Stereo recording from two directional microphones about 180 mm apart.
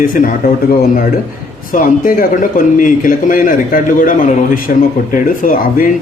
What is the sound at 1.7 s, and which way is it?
Speech, 50° left (ahead or behind).